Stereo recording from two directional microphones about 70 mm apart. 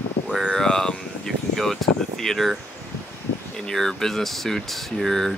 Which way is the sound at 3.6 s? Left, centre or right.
Centre.